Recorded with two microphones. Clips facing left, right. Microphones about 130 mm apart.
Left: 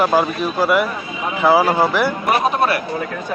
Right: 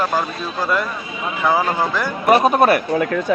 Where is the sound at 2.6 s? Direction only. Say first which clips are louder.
Right 4 dB; 50° right (ahead or behind).